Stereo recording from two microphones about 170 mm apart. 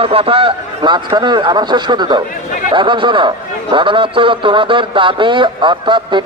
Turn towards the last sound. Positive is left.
turn(degrees=-30)  # may be behind; listen again after turning